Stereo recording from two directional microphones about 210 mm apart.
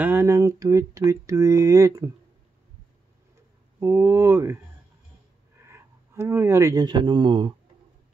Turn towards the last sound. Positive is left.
turn(degrees=-25)  # may be behind; listen again after turning